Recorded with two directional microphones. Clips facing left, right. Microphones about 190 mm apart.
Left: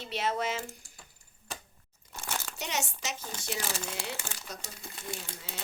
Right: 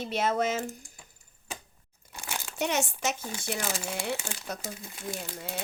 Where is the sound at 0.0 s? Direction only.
50° right (ahead or behind).